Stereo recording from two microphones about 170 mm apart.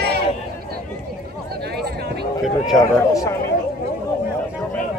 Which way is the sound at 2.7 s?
20° left (ahead or behind).